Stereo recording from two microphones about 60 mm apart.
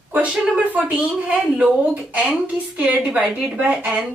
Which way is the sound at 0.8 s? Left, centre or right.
Right.